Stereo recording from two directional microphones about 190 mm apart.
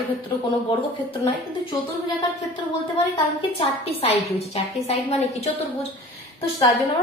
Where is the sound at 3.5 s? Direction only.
30° left (ahead or behind).